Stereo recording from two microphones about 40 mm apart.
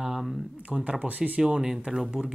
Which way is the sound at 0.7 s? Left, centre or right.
Right.